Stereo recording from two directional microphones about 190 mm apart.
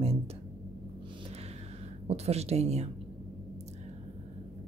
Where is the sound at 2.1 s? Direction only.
35° right (ahead or behind).